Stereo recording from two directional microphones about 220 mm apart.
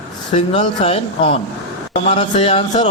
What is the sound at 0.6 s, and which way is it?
A man's voice, 30° left (ahead or behind).